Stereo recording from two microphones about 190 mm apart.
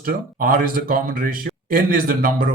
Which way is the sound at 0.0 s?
50° right (ahead or behind).